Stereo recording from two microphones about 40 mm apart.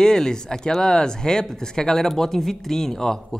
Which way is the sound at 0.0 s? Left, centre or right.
Centre.